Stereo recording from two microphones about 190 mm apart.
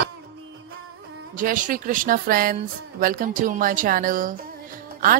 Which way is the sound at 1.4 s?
45° right (ahead or behind).